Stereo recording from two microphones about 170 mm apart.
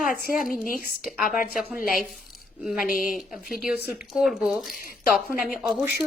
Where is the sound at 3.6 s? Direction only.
5° right (ahead or behind).